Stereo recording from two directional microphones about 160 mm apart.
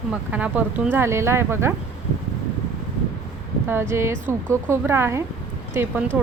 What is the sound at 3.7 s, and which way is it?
Speech, 15° right (ahead or behind).